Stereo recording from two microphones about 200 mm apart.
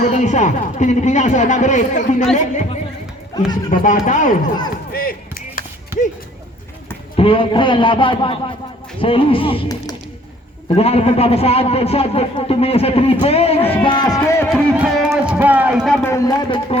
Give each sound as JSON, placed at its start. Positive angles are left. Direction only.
{"t": 0.1, "sound": "speech", "side_deg": 35}
{"t": 4.9, "sound": "chop", "side_deg": 50}
{"t": 7.2, "sound": "a man's voice", "side_deg": 25}
{"t": 14.5, "sound": "speech", "side_deg": -5}
{"t": 16.0, "sound": "a man's voice", "side_deg": 15}